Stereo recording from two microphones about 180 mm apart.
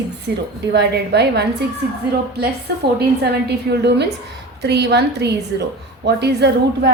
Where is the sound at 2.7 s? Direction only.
65° right (ahead or behind).